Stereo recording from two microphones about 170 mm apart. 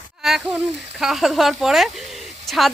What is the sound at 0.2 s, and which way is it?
Speech, centre (ahead or behind).